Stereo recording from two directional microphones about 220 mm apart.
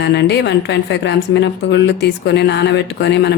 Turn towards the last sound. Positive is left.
turn(degrees=50)  # may be behind; listen again after turning